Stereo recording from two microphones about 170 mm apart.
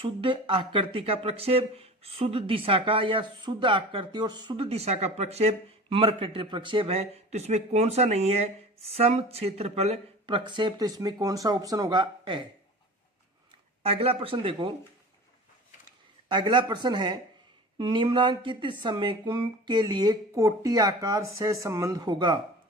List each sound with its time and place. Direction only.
0.0 s speech: 30° right (ahead or behind)
13.8 s speech: 35° right (ahead or behind)
16.3 s speech: 25° right (ahead or behind)